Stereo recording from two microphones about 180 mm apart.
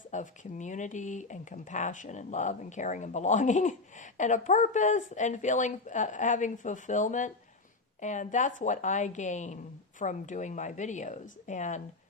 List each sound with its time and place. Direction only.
0.1 s speech: 40° left (ahead or behind)